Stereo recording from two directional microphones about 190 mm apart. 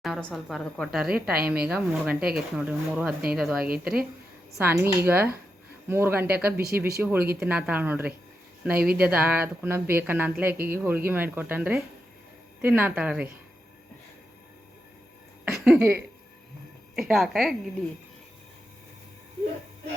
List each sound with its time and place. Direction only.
0.0 s speech: centre (ahead or behind)
1.2 s a woman's voice: 55° right (ahead or behind)
1.6 s speech: 5° right (ahead or behind)
6.6 s speech: 55° right (ahead or behind)
7.0 s speech: 10° right (ahead or behind)
15.4 s a woman's voice: 5° right (ahead or behind)